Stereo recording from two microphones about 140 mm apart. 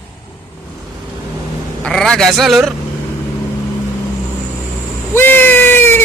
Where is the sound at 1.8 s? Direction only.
5° left (ahead or behind).